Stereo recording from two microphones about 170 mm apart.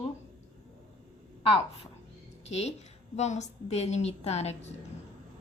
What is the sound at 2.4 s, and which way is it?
A woman's voice, 40° left (ahead or behind).